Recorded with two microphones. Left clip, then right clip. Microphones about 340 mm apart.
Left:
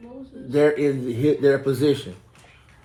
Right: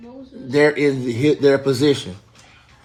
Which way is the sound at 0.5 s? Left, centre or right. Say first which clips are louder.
Right 3 dB; right.